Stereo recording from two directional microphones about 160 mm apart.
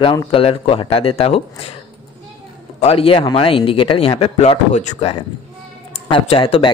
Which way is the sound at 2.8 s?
40° left (ahead or behind).